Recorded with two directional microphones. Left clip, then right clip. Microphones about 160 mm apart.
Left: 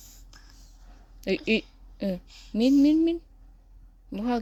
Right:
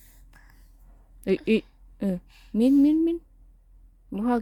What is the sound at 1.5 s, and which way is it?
Speech, 45° right (ahead or behind).